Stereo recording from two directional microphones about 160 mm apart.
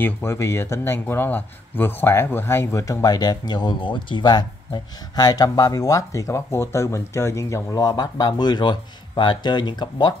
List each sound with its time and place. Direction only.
0.0 s speech: 15° left (ahead or behind)